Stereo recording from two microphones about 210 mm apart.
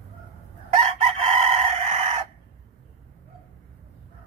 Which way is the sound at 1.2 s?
30° right (ahead or behind).